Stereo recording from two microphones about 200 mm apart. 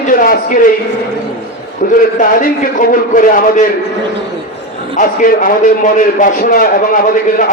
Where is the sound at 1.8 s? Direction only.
40° left (ahead or behind).